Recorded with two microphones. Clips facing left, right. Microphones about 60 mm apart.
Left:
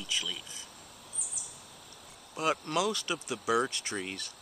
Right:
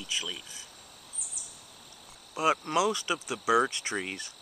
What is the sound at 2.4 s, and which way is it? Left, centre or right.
Speech, centre.